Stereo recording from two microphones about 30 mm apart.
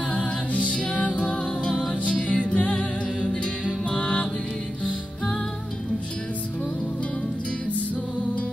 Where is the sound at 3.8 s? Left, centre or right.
Left.